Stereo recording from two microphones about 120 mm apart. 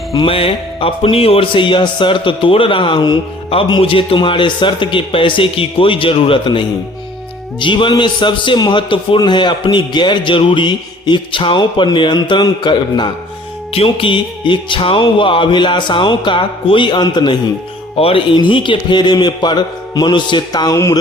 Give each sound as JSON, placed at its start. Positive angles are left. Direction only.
{"t": 0.3, "sound": "music", "side_deg": 50}
{"t": 7.6, "sound": "a man's voice", "side_deg": 45}
{"t": 13.7, "sound": "music", "side_deg": 50}
{"t": 18.0, "sound": "speech", "side_deg": 55}
{"t": 18.3, "sound": "a man's voice", "side_deg": 40}